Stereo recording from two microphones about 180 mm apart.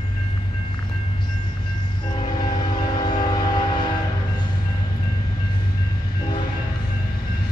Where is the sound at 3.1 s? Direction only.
25° left (ahead or behind).